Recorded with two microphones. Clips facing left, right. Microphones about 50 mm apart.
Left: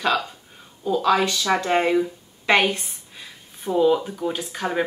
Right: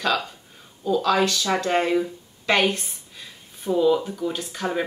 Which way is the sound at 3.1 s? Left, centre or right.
Centre.